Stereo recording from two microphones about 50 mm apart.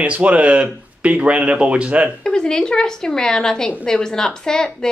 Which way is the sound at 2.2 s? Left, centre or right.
Centre.